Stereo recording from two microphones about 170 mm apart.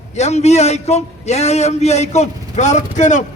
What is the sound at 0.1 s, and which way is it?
A man's voice, 40° left (ahead or behind).